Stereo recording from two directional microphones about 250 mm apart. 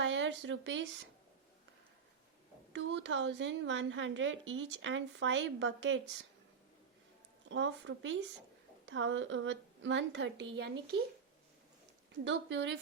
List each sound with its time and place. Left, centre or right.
0.0 s speech: right
2.7 s a woman's voice: right
7.4 s a woman's voice: right
12.2 s a woman's voice: right